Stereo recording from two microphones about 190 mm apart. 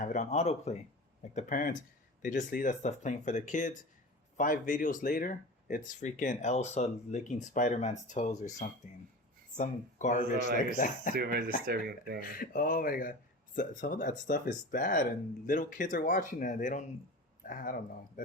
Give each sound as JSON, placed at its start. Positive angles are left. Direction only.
{"t": 0.0, "sound": "speech", "side_deg": 40}
{"t": 11.1, "sound": "speech", "side_deg": -55}
{"t": 12.3, "sound": "speech", "side_deg": 45}